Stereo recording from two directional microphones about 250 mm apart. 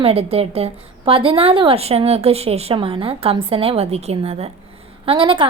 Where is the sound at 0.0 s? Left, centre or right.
Right.